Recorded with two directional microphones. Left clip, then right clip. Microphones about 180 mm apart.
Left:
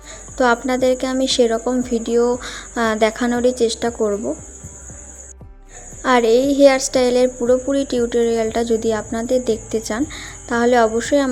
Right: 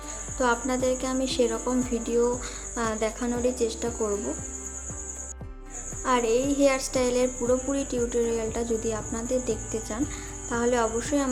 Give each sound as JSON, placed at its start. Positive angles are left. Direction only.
{"t": 0.3, "sound": "a woman's voice", "side_deg": 35}
{"t": 6.0, "sound": "a woman's voice", "side_deg": 35}